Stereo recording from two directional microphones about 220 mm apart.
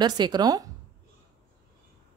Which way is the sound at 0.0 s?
20° right (ahead or behind).